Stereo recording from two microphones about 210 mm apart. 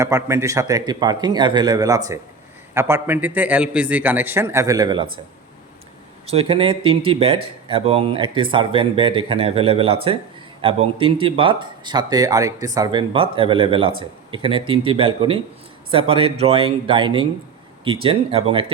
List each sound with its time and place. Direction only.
0.0 s a man's voice: 15° right (ahead or behind)
6.2 s a man's voice: 25° right (ahead or behind)